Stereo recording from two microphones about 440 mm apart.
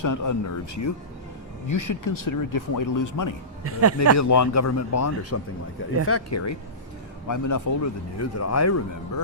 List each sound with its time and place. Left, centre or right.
0.0 s speech: left
3.6 s speech: right
4.2 s speech: left